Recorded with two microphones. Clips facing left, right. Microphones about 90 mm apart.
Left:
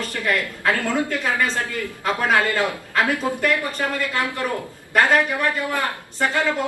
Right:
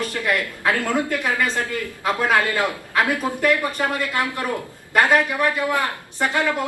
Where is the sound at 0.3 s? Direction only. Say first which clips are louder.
Left 1 dB; 15° right (ahead or behind).